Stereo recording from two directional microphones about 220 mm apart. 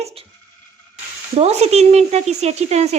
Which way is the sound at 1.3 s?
30° right (ahead or behind).